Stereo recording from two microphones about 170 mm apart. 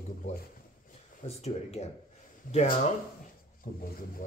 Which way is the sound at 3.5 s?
55° left (ahead or behind).